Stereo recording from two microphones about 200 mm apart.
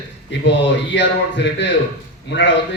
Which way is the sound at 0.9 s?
60° left (ahead or behind).